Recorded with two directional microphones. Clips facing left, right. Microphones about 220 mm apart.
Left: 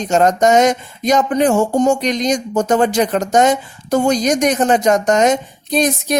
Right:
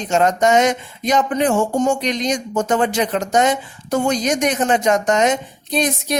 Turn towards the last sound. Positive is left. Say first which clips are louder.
# left 4 dB
turn(degrees=45)  # may be behind; listen again after turning